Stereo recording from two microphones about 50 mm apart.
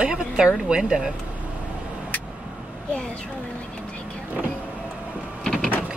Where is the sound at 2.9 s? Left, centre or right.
Centre.